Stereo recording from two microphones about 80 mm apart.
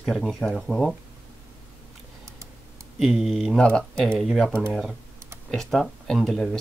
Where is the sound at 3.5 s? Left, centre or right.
Centre.